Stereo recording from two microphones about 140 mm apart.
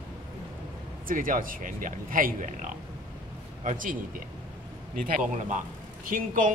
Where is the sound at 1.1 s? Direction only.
75° right (ahead or behind).